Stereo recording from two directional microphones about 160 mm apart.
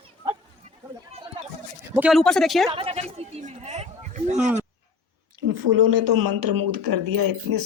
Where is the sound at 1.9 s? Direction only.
10° right (ahead or behind).